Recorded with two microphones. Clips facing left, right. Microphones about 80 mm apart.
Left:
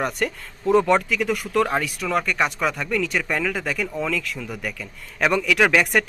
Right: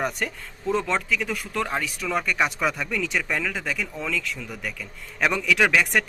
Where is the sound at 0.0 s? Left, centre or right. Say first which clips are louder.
Left 3 dB; centre.